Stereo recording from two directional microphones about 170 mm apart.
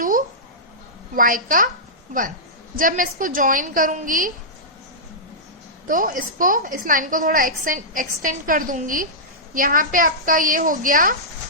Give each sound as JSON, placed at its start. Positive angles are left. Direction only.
{"t": 1.1, "sound": "a woman's voice", "side_deg": -55}
{"t": 2.7, "sound": "a woman's voice", "side_deg": -50}
{"t": 5.9, "sound": "a woman's voice", "side_deg": -55}